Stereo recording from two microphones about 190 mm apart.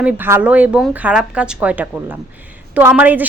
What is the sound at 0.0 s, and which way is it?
A woman's voice, 10° right (ahead or behind).